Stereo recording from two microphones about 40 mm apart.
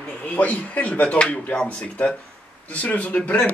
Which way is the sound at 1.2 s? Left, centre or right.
Left.